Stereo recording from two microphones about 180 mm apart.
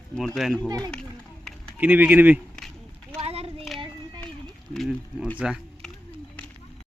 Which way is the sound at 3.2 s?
35° right (ahead or behind).